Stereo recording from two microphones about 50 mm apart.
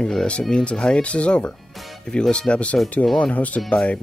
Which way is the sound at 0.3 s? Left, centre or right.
Centre.